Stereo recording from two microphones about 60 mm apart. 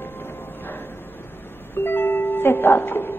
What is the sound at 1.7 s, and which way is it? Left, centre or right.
Music, left.